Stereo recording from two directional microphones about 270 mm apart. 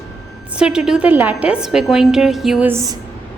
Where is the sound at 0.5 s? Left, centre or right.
Centre.